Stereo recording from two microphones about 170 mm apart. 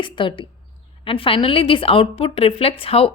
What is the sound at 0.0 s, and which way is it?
A woman's voice, 30° left (ahead or behind).